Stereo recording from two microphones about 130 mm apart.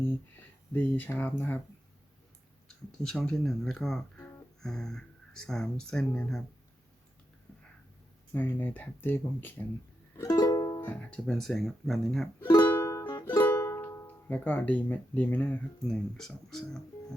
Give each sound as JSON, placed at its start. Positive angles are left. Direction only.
{"t": 0.7, "sound": "speech", "side_deg": 15}
{"t": 3.0, "sound": "speech", "side_deg": 5}
{"t": 8.3, "sound": "speech", "side_deg": 15}
{"t": 10.2, "sound": "music", "side_deg": 25}
{"t": 10.8, "sound": "speech", "side_deg": 10}
{"t": 12.6, "sound": "music", "side_deg": 15}
{"t": 15.9, "sound": "speech", "side_deg": 5}